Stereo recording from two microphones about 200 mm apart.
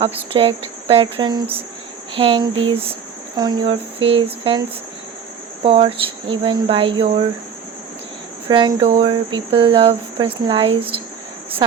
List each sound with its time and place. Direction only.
0.0 s cricket: 25° right (ahead or behind)
5.6 s cricket: 25° right (ahead or behind)
8.4 s cricket: 25° right (ahead or behind)